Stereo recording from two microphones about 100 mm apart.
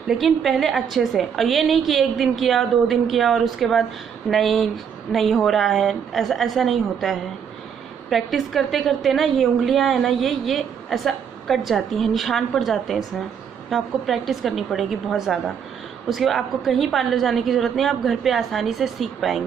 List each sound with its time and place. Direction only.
0.1 s a woman's voice: centre (ahead or behind)